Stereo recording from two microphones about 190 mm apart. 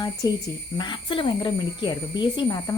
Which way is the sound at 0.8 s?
25° left (ahead or behind).